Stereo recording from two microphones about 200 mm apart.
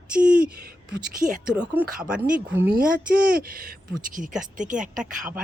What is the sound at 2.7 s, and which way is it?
A woman's voice, 45° right (ahead or behind).